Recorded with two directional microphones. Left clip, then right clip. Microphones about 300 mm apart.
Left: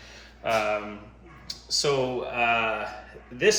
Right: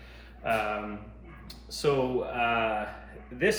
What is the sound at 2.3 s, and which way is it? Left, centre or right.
Speech, left.